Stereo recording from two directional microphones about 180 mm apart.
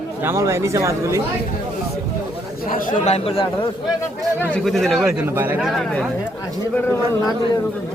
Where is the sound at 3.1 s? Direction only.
30° left (ahead or behind).